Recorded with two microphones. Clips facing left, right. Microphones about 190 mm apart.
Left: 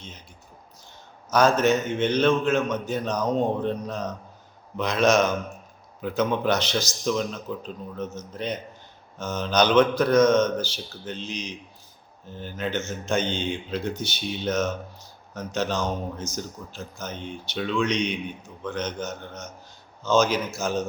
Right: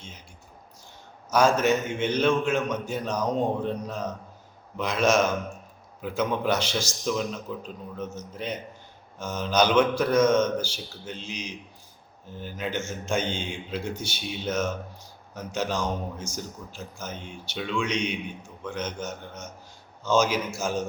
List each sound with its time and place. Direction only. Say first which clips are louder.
1.3 s a man's voice: left 2 dB; 10° right (ahead or behind)